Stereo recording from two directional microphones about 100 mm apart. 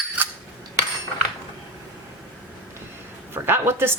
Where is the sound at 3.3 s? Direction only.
25° right (ahead or behind).